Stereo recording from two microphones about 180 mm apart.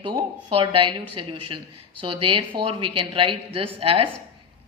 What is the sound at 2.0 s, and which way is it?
A woman's voice, 30° right (ahead or behind).